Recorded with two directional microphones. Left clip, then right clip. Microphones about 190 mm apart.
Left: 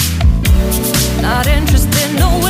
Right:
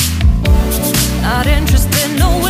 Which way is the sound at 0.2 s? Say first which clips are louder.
Even; centre (ahead or behind).